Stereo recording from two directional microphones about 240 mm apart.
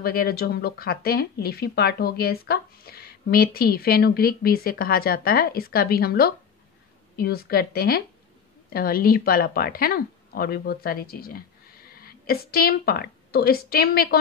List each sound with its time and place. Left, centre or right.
0.0 s a woman's voice: left